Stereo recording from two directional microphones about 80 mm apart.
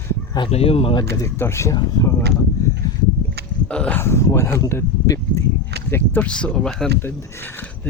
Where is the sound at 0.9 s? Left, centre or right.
Left.